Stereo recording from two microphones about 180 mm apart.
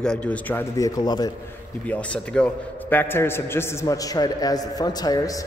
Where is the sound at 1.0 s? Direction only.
20° left (ahead or behind).